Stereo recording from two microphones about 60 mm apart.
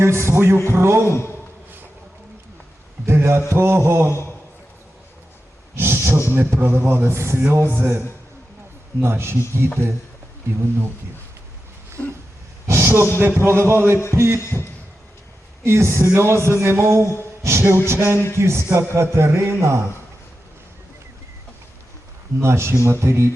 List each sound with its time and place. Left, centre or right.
0.0 s speech: right
3.1 s speech: right
4.1 s a man's voice: left
5.7 s a sound: right
6.3 s speech: right
7.5 s speech: right
12.0 s a sound: left
12.6 s a sound: right
13.4 s speech: right
15.6 s speech: right
22.4 s speech: right